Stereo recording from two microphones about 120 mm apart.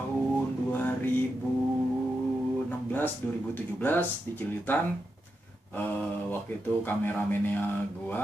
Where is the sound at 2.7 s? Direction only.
15° left (ahead or behind).